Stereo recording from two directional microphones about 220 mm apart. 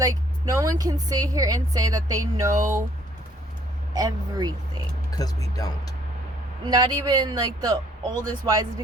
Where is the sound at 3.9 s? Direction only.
15° right (ahead or behind).